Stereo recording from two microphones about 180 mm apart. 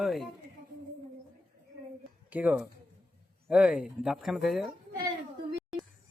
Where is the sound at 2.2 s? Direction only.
10° right (ahead or behind).